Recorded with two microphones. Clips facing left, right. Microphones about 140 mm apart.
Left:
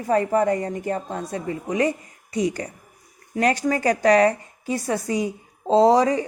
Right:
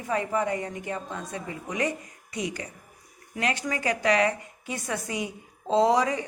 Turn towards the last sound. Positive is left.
turn(degrees=35)  # may be behind; listen again after turning